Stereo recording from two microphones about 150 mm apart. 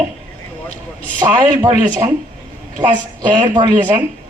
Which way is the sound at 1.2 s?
25° right (ahead or behind).